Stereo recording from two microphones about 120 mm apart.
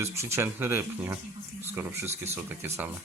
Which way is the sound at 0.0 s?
25° right (ahead or behind).